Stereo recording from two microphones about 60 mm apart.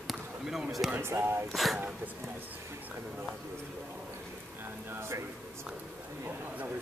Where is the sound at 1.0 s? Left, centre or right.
Right.